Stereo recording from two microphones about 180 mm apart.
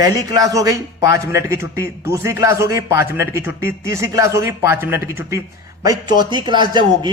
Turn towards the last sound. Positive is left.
turn(degrees=-25)  # may be behind; listen again after turning